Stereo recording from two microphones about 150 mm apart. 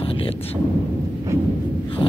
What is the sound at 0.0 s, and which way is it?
Thunder, 35° left (ahead or behind).